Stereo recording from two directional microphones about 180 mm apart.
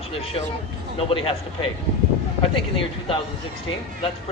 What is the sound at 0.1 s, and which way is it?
Speech, 30° left (ahead or behind).